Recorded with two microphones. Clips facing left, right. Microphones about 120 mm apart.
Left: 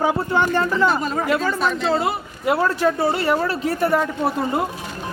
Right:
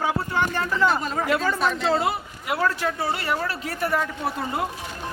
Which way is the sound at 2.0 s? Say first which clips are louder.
Left 3 dB; 30° left (ahead or behind).